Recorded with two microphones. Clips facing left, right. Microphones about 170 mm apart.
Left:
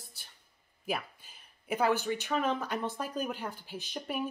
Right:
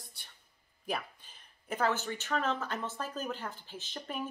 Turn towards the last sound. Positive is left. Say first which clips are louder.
# left 4 dB
turn(degrees=10)  # may be behind; listen again after turning